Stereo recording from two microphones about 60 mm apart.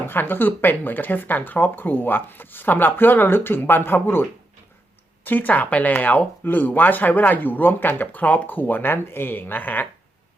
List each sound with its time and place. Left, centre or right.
0.1 s speech: left